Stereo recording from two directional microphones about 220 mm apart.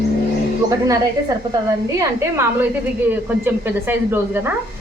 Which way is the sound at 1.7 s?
15° right (ahead or behind).